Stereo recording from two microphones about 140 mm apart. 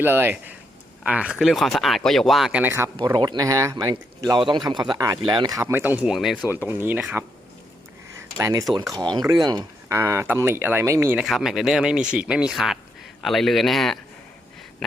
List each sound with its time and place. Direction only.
0.0 s speech: 15° right (ahead or behind)
3.0 s speech: 30° right (ahead or behind); by 6.4 s centre (ahead or behind)
6.7 s speech: 15° right (ahead or behind)
8.4 s speech: 25° right (ahead or behind)
10.0 s speech: 15° right (ahead or behind)
11.2 s speech: 5° right (ahead or behind)
14.8 s a sound: centre (ahead or behind)